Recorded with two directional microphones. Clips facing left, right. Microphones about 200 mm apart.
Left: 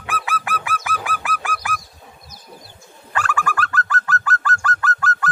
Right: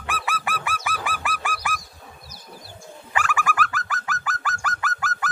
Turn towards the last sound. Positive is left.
turn(degrees=-15)  # may be behind; listen again after turning